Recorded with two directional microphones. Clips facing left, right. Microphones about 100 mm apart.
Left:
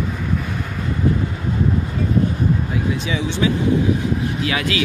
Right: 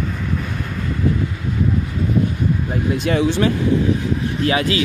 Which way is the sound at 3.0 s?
55° right (ahead or behind).